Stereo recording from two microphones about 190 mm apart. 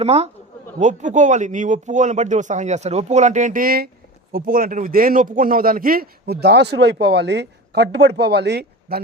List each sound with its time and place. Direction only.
0.0 s speech: 35° right (ahead or behind); by 9.0 s 60° right (ahead or behind)